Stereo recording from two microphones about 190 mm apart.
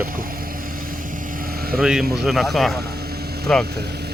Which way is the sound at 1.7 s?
5° right (ahead or behind).